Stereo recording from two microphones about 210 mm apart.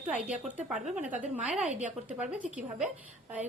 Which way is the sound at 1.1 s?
35° right (ahead or behind).